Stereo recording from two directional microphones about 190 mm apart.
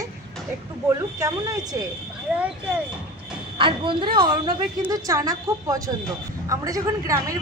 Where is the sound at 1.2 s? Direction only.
20° right (ahead or behind).